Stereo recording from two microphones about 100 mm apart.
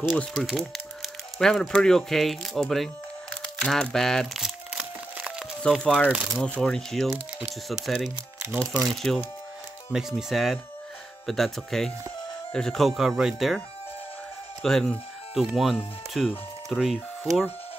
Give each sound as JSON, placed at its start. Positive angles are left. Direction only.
{"t": 0.2, "sound": "speech", "side_deg": 5}
{"t": 3.4, "sound": "crumpling", "side_deg": 5}
{"t": 5.1, "sound": "a sound", "side_deg": -10}
{"t": 5.6, "sound": "speech", "side_deg": 10}
{"t": 8.4, "sound": "speech", "side_deg": -25}
{"t": 8.8, "sound": "speech", "side_deg": 5}
{"t": 14.6, "sound": "speech", "side_deg": 5}